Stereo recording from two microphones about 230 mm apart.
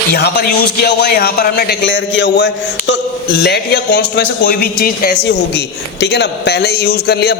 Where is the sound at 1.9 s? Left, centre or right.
Left.